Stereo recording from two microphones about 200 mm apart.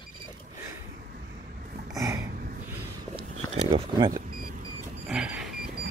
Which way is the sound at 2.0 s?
15° right (ahead or behind).